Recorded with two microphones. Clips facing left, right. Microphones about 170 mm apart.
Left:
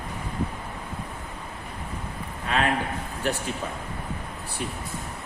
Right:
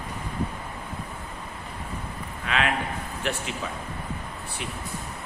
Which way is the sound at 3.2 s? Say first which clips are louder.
Left 3 dB; 40° left (ahead or behind).